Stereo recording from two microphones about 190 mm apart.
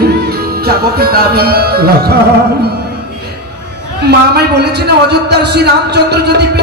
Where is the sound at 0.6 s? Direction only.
55° right (ahead or behind).